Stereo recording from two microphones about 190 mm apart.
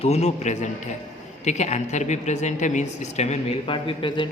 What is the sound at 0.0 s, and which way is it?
A woman's voice, 35° left (ahead or behind).